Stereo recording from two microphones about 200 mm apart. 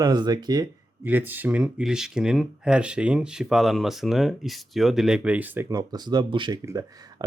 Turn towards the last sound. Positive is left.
turn(degrees=-20)  # may be behind; listen again after turning